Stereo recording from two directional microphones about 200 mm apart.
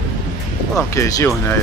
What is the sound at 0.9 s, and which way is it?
Speech, 15° left (ahead or behind).